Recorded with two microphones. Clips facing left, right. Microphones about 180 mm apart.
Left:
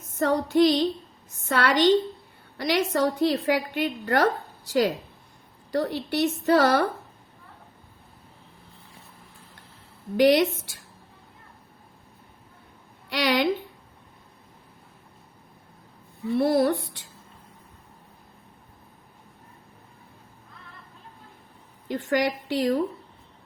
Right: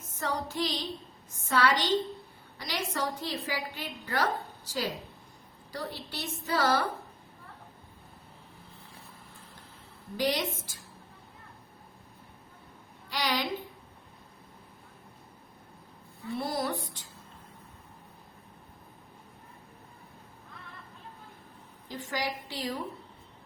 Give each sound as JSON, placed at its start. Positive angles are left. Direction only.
{"t": 0.2, "sound": "a woman's voice", "side_deg": 65}
{"t": 5.7, "sound": "a woman's voice", "side_deg": 65}
{"t": 10.2, "sound": "a woman's voice", "side_deg": 70}
{"t": 13.1, "sound": "a woman's voice", "side_deg": 70}
{"t": 16.4, "sound": "a woman's voice", "side_deg": 65}
{"t": 21.8, "sound": "a woman's voice", "side_deg": 60}